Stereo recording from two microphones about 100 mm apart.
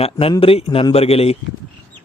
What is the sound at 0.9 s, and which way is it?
Speech, 80° left.